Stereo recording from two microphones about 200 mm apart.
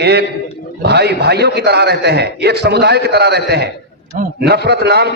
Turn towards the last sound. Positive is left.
turn(degrees=-55)  # may be behind; listen again after turning